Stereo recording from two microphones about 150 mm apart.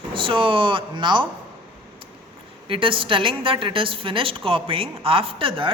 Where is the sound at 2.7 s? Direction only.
35° right (ahead or behind).